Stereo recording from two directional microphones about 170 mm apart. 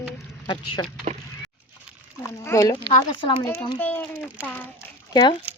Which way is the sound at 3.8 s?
10° left (ahead or behind).